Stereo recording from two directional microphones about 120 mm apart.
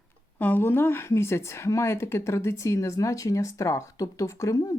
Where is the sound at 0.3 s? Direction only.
15° left (ahead or behind).